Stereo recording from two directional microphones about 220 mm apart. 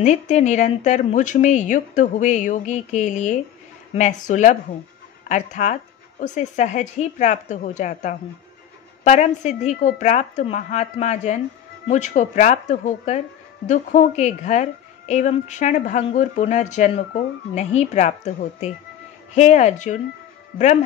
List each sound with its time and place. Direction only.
0.0 s speech: 30° left (ahead or behind)